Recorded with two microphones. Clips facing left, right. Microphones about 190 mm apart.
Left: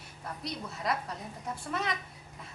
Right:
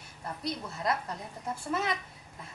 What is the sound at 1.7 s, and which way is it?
Speech, centre (ahead or behind).